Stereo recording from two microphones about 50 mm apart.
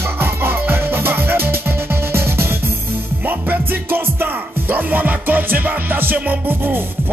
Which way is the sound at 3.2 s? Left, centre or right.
Right.